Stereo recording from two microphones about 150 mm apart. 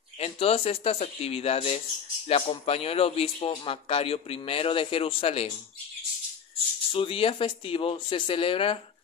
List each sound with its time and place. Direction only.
0.2 s speech: 40° left (ahead or behind)
6.9 s speech: 35° left (ahead or behind)